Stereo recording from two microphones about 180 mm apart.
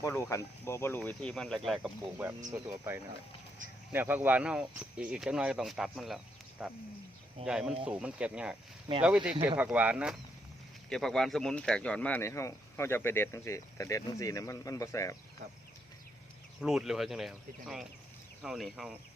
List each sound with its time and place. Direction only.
0.0 s speech: 15° left (ahead or behind); by 2.1 s centre (ahead or behind)
2.5 s speech: 15° right (ahead or behind); by 15.1 s 15° left (ahead or behind)
16.6 s speech: centre (ahead or behind)